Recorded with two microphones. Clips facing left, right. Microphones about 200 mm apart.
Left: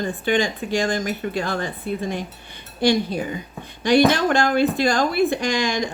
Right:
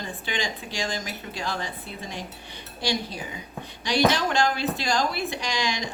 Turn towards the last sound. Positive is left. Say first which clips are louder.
# left 7 dB
turn(degrees=50)  # may be behind; listen again after turning